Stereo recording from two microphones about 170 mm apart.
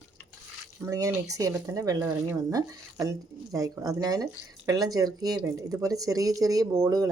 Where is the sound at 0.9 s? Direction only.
20° right (ahead or behind).